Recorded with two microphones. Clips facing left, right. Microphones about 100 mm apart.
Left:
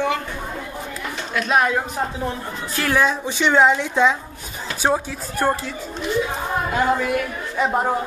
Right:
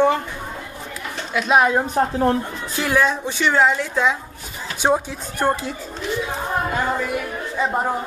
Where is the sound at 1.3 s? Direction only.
10° right (ahead or behind).